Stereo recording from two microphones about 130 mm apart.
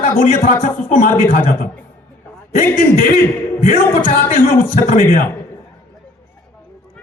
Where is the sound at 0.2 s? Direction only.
90° left.